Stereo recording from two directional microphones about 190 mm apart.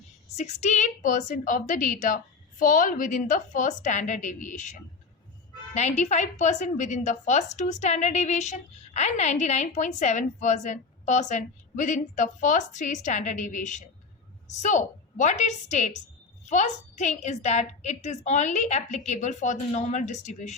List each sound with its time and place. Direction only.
0.3 s a woman's voice: 35° left (ahead or behind)
5.7 s a woman's voice: 35° left (ahead or behind)